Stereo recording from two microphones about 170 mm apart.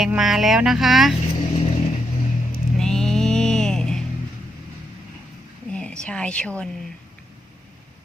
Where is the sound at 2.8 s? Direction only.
5° left (ahead or behind).